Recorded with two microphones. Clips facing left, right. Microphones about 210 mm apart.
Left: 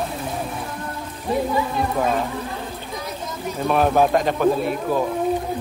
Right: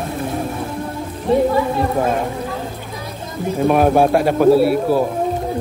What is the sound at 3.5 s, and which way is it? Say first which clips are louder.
A man's voice: right 5 dB; 10° right (ahead or behind).